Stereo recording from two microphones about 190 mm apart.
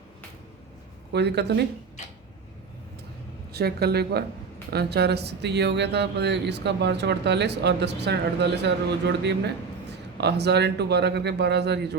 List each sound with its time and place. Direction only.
1.1 s speech: 60° right (ahead or behind)
3.5 s speech: 55° right (ahead or behind)